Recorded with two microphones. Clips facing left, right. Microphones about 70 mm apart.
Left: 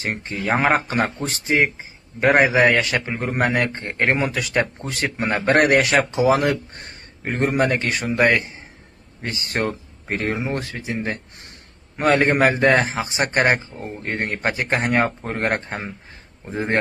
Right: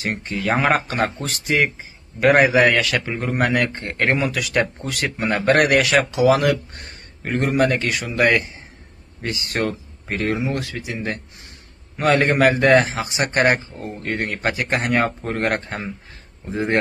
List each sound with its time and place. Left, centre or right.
0.0 s a man's voice: left